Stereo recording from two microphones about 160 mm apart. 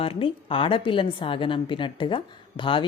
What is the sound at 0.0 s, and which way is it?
Speech, 35° left (ahead or behind).